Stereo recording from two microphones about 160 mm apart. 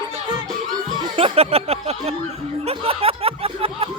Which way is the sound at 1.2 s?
35° right (ahead or behind).